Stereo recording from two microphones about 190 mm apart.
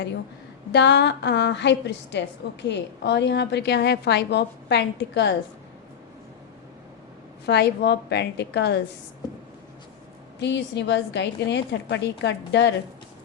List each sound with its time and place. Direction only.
0.7 s a woman's voice: 65° left (ahead or behind)
7.4 s a woman's voice: 60° left (ahead or behind)
10.4 s a woman's voice: 65° left (ahead or behind)